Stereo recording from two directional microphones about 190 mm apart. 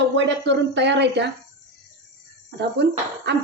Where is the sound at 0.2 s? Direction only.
65° right (ahead or behind).